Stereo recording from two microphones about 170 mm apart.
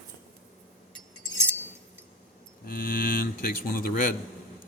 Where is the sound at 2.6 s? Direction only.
55° left (ahead or behind).